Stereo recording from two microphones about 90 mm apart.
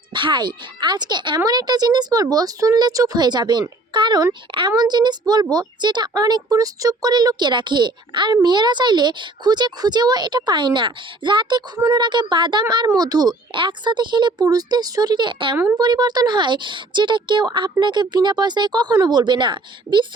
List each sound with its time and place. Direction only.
0.1 s speech: 60° right (ahead or behind)
13.5 s speech: 65° right (ahead or behind)
15.8 s speech: 50° right (ahead or behind)